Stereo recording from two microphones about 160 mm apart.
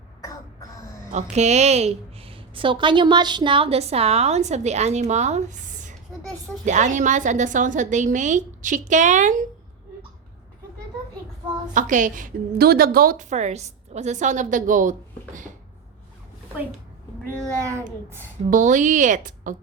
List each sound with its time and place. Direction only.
1.1 s a woman's voice: 45° right (ahead or behind)
11.7 s a woman's voice: 50° right (ahead or behind)
13.3 s a woman's voice: 45° right (ahead or behind)
17.6 s a child's voice: 15° right (ahead or behind)
18.5 s a woman's voice: 50° right (ahead or behind)